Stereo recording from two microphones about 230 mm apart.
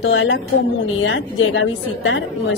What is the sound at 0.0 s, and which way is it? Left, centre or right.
A woman's voice, left.